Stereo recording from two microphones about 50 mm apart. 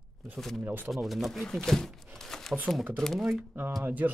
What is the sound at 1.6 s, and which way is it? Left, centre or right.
Crumpling, centre.